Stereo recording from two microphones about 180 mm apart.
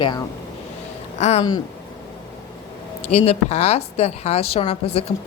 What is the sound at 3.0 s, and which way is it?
A woman's voice, 35° left (ahead or behind).